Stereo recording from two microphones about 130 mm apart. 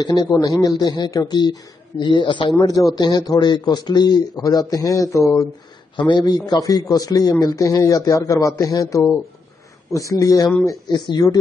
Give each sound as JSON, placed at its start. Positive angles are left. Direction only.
{"t": 0.0, "sound": "speech", "side_deg": 30}
{"t": 2.5, "sound": "a man's voice", "side_deg": 25}
{"t": 5.9, "sound": "a man's voice", "side_deg": 35}